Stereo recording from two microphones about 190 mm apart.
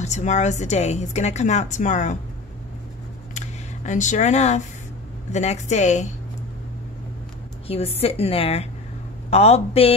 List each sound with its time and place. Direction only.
0.0 s speech: 40° left (ahead or behind)
3.3 s camera: 40° left (ahead or behind)
5.3 s speech: 35° left (ahead or behind)
7.6 s a woman's voice: 30° left (ahead or behind)